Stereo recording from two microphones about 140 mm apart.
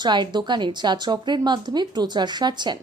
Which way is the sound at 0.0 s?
30° right (ahead or behind).